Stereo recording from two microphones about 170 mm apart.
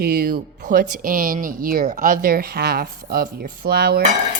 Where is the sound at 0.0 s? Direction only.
65° right (ahead or behind).